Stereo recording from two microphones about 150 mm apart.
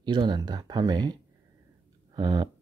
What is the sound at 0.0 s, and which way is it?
Speech, 30° right (ahead or behind).